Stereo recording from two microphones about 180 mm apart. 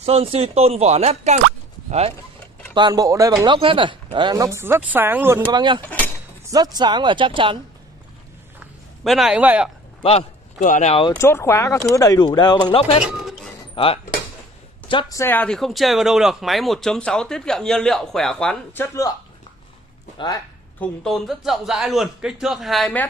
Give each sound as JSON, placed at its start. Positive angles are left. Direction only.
{"t": 0.0, "sound": "speech", "side_deg": -35}
{"t": 2.7, "sound": "speech", "side_deg": -25}
{"t": 9.0, "sound": "speech", "side_deg": 0}
{"t": 10.0, "sound": "speech", "side_deg": 40}
{"t": 11.1, "sound": "speech", "side_deg": 15}
{"t": 13.0, "sound": "music", "side_deg": 0}
{"t": 13.8, "sound": "speech", "side_deg": 30}
{"t": 15.1, "sound": "speech", "side_deg": 10}
{"t": 20.8, "sound": "speech", "side_deg": 0}